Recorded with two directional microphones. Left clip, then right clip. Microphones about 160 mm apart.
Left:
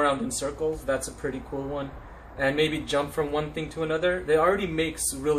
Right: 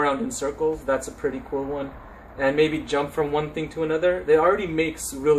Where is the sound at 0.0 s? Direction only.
25° right (ahead or behind).